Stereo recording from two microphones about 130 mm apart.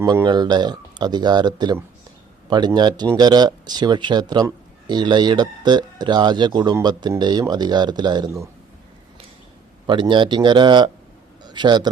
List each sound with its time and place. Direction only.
0.3 s speech: 35° right (ahead or behind)
9.8 s a man's voice: 40° right (ahead or behind)